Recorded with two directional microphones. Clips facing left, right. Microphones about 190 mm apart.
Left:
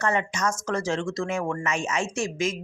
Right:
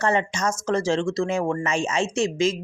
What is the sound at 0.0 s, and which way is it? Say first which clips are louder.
Speech: right 3 dB; 30° right (ahead or behind).